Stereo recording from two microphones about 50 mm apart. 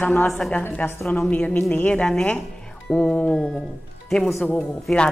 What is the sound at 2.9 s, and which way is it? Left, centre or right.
Speech, left.